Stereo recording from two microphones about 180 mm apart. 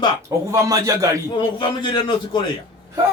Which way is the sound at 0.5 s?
20° right (ahead or behind).